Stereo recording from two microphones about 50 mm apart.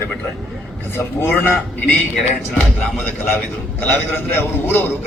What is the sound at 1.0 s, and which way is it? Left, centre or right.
Speech, left.